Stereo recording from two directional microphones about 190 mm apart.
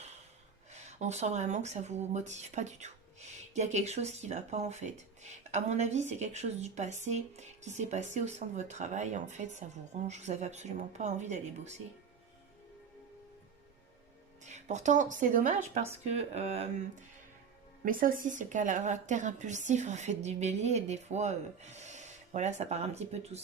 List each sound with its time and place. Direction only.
0.7 s speech: 35° right (ahead or behind)
14.4 s speech: 40° right (ahead or behind)
17.8 s speech: 45° right (ahead or behind)